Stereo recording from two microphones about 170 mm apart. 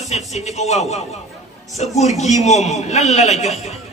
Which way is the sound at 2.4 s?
40° left (ahead or behind).